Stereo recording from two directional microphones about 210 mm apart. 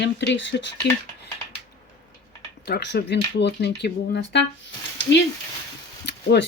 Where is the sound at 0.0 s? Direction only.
60° left (ahead or behind).